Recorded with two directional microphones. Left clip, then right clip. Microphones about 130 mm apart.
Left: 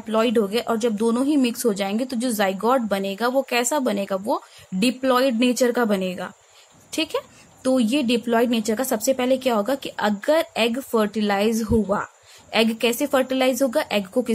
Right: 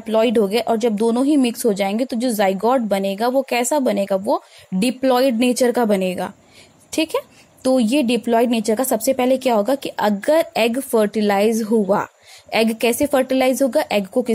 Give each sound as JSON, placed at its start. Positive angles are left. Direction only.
{"t": 0.0, "sound": "a woman's voice", "side_deg": -35}